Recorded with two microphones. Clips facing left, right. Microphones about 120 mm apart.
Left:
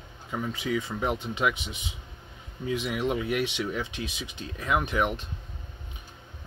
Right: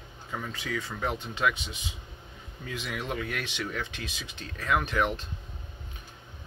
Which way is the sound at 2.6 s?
20° left (ahead or behind).